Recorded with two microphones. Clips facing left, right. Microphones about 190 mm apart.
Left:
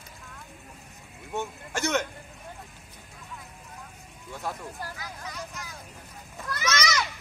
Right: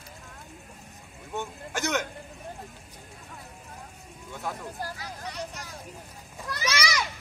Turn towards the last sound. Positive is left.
turn(degrees=-10)  # may be behind; listen again after turning